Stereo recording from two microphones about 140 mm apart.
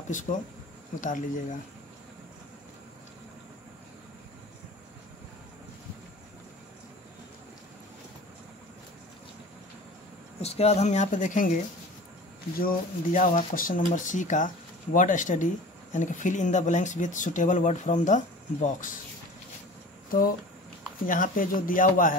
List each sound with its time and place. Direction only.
0.1 s speech: 65° left (ahead or behind)
10.4 s speech: 50° left (ahead or behind); by 11.6 s 65° left (ahead or behind)
12.5 s speech: 85° left; by 18.9 s 65° left (ahead or behind)
20.1 s speech: 90° left
21.0 s speech: 75° left (ahead or behind)